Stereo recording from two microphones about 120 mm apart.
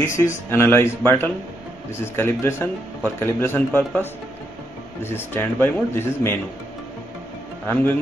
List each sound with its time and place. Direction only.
0.0 s speech: 20° left (ahead or behind)
7.6 s speech: 15° left (ahead or behind)